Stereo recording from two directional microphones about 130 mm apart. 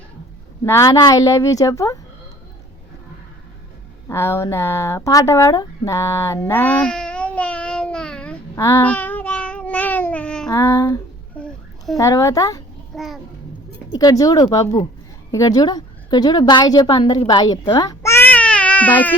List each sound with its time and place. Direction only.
0.6 s a woman's voice: 20° left (ahead or behind)
4.1 s speech: 20° left (ahead or behind)
8.5 s a woman's voice: 20° left (ahead or behind)
8.9 s cat: 10° left (ahead or behind)
10.5 s a woman's voice: 25° left (ahead or behind)
11.3 s a sound: 5° left (ahead or behind)
11.9 s a woman's voice: 25° left (ahead or behind)
14.0 s a woman's voice: 30° left (ahead or behind)
18.0 s baby cry: 20° left (ahead or behind)